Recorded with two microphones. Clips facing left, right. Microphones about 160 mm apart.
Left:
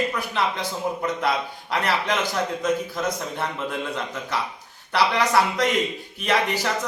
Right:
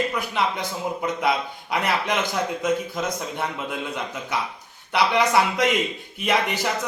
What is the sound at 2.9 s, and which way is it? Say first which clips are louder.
Speech: left 1 dB; 15° right (ahead or behind).